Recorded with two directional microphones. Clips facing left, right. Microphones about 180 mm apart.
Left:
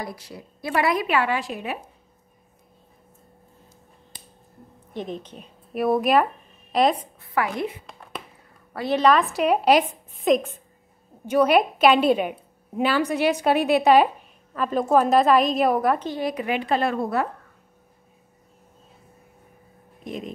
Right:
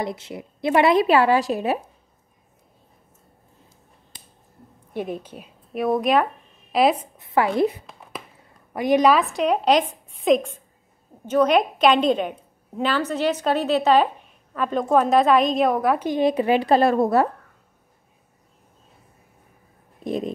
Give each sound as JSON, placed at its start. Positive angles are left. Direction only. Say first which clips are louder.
{"t": 0.0, "sound": "a woman's voice", "louder": "right 6 dB", "side_deg": -25}
{"t": 4.9, "sound": "a woman's voice", "louder": "right 3 dB", "side_deg": -10}
{"t": 5.7, "sound": "a woman's voice", "louder": "even", "side_deg": 5}
{"t": 7.2, "sound": "a woman's voice", "louder": "right 6 dB", "side_deg": -25}
{"t": 7.8, "sound": "a sound", "louder": "even", "side_deg": -5}
{"t": 8.7, "sound": "a woman's voice", "louder": "right 2 dB", "side_deg": -15}
{"t": 9.2, "sound": "a woman's voice", "louder": "even", "side_deg": 5}
{"t": 16.0, "sound": "a woman's voice", "louder": "right 7 dB", "side_deg": -20}